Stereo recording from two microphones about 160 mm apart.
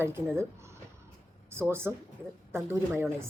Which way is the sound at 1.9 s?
15° right (ahead or behind).